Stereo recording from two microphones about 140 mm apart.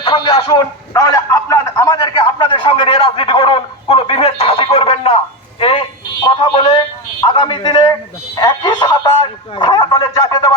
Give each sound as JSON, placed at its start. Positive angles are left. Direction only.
{"t": 0.0, "sound": "a man's voice", "side_deg": 35}